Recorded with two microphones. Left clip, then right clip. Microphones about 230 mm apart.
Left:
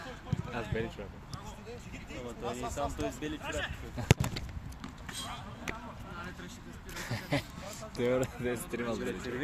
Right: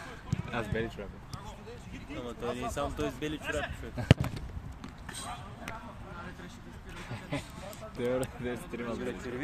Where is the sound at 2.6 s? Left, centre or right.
Right.